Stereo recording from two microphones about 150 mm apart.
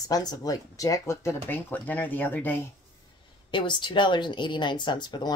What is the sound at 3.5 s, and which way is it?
Speech, 30° left (ahead or behind).